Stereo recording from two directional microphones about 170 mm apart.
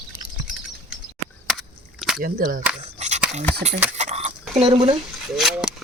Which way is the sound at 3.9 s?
40° right (ahead or behind).